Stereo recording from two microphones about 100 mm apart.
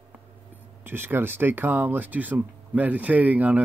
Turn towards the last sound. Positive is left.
turn(degrees=-15)  # may be behind; listen again after turning